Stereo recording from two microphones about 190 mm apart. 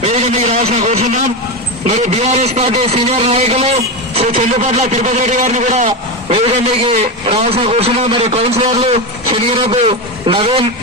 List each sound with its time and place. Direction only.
0.0 s a man's voice: 35° right (ahead or behind)